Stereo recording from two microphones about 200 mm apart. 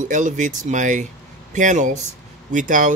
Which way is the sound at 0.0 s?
40° right (ahead or behind).